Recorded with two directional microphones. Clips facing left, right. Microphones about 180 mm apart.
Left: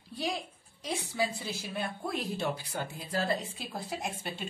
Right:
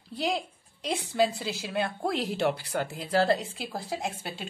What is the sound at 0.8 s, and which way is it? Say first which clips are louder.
A woman's voice: right 6 dB; 80° right.